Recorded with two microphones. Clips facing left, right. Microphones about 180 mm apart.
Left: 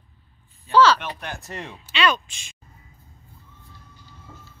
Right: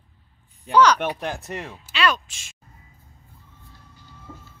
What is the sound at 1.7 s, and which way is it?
Speech, centre (ahead or behind).